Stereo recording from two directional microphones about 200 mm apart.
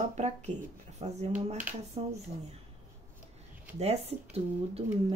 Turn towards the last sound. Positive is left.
turn(degrees=-30)  # may be behind; listen again after turning